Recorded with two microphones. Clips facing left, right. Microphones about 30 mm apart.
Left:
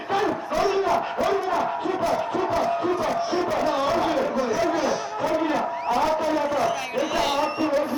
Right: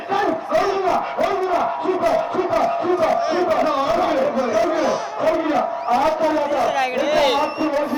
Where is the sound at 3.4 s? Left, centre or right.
Right.